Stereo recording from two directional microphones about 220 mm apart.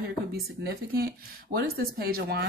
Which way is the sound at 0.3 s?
45° right (ahead or behind).